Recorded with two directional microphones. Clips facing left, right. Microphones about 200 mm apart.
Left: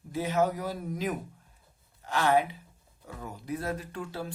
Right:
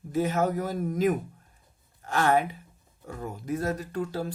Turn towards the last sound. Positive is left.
turn(degrees=-40)  # may be behind; listen again after turning